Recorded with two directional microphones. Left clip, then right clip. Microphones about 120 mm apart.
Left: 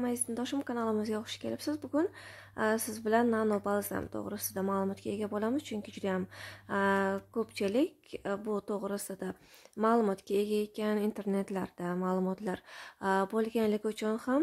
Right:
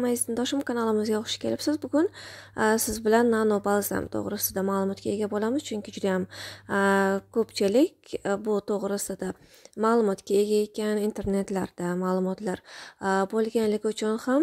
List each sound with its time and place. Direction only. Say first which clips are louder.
0.0 s speech: right 8 dB; 50° right (ahead or behind)